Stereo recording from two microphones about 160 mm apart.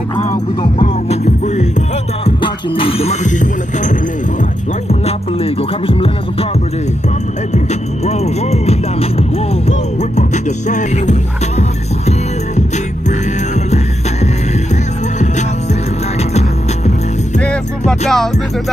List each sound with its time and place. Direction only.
0.6 s music: 40° left (ahead or behind)
4.8 s music: 40° left (ahead or behind)
7.5 s music: 45° left (ahead or behind)
17.4 s music: 5° left (ahead or behind)